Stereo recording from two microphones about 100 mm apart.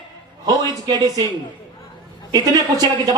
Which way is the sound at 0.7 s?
40° right (ahead or behind).